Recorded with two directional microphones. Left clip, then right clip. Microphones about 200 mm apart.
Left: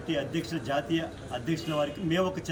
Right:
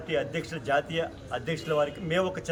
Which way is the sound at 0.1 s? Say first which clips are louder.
Right 1 dB; 5° right (ahead or behind).